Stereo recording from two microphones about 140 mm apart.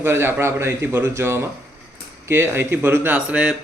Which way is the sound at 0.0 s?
15° right (ahead or behind).